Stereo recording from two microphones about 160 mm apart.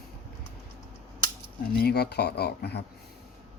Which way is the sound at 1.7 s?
85° left.